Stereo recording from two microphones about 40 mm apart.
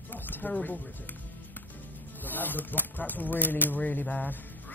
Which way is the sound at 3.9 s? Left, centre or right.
Left.